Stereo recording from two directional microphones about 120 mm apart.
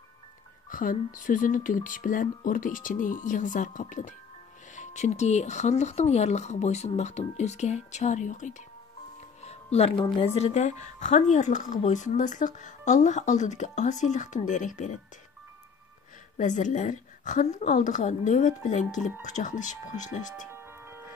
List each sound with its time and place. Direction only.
0.7 s speech: 90° left
4.7 s speech: 75° left (ahead or behind); by 8.6 s 90° left
9.4 s music: 65° left (ahead or behind)
9.9 s speech: 50° left (ahead or behind); by 15.0 s 90° left
16.3 s speech: 90° left
20.5 s music: 20° right (ahead or behind)